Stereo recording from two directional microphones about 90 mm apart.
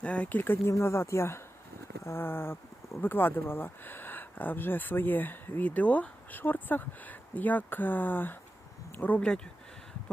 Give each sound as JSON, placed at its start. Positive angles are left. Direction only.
{"t": 0.0, "sound": "speech", "side_deg": 15}